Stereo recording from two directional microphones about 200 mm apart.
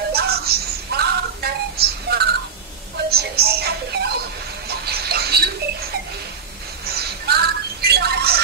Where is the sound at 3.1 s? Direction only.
50° right (ahead or behind).